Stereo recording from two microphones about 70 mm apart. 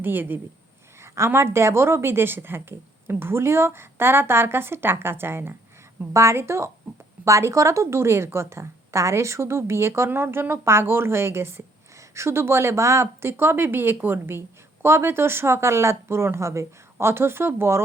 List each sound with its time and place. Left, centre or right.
0.0 s speech: right
1.0 s speech: right